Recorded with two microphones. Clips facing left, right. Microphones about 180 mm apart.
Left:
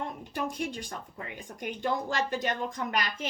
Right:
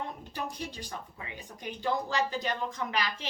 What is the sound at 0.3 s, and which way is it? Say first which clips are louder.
A woman's voice: left 5 dB; 50° left (ahead or behind).